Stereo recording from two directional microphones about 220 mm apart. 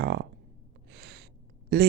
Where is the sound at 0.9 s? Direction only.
50° right (ahead or behind).